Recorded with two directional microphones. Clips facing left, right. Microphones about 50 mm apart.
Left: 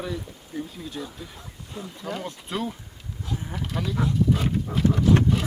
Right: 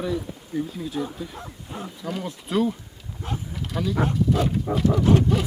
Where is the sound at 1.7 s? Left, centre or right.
Right.